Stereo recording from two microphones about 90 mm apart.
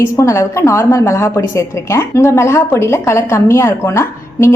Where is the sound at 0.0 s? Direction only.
30° left (ahead or behind).